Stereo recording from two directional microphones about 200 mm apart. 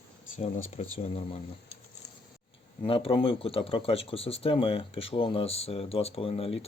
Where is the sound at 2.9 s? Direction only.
25° left (ahead or behind).